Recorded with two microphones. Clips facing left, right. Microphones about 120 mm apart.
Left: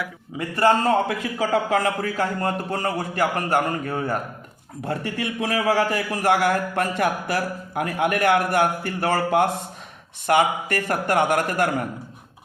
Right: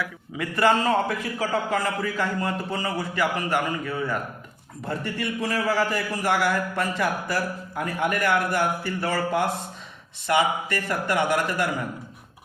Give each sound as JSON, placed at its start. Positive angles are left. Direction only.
{"t": 0.5, "sound": "a man's voice", "side_deg": 35}
{"t": 0.9, "sound": "a man's voice", "side_deg": 65}
{"t": 4.9, "sound": "a man's voice", "side_deg": 60}